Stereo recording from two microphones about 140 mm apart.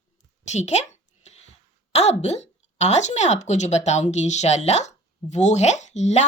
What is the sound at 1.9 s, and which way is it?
Speech, 50° left (ahead or behind).